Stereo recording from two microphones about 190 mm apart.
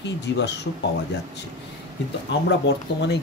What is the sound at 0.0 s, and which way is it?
Speech, 65° left (ahead or behind).